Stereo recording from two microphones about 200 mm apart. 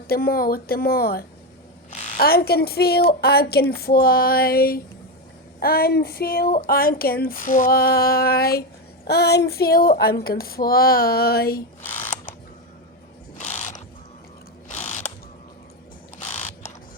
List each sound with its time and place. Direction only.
0.1 s speech: 50° left (ahead or behind)
13.4 s mechanisms: 35° left (ahead or behind)
14.7 s ratchet: 35° left (ahead or behind)
16.2 s mechanisms: 35° left (ahead or behind)